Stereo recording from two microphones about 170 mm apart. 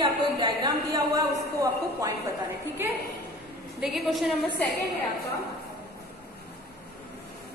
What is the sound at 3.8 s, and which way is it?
Speech, centre (ahead or behind).